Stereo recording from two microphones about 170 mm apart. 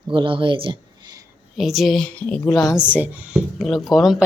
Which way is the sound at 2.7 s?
5° right (ahead or behind).